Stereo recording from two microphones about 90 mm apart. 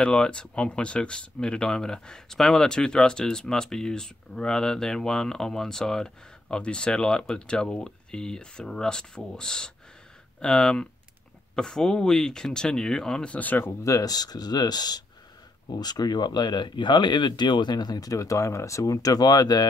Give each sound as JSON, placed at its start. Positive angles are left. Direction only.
{"t": 0.0, "sound": "speech", "side_deg": 10}
{"t": 13.8, "sound": "speech", "side_deg": 40}